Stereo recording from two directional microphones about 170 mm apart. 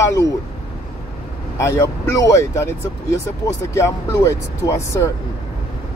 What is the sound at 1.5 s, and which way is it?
Speech, 15° left (ahead or behind).